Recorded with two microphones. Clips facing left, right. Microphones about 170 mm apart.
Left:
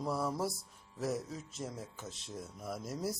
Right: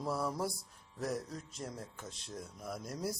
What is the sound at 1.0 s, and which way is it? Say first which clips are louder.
Music: left 1 dB; centre (ahead or behind).